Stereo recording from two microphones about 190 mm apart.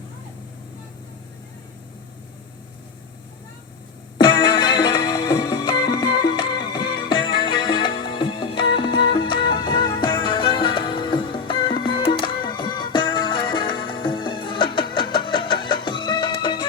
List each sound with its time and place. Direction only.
4.2 s music: 25° left (ahead or behind)